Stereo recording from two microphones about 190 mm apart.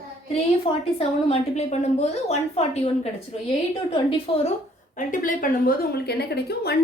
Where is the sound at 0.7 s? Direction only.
25° left (ahead or behind).